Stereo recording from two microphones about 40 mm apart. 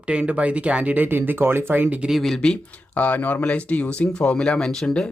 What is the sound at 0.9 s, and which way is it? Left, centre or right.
Speech, right.